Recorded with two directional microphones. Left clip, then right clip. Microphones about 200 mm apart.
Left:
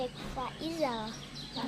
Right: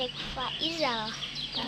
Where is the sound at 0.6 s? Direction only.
5° left (ahead or behind).